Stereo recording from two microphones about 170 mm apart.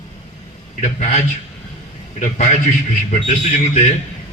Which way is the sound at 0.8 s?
45° left (ahead or behind).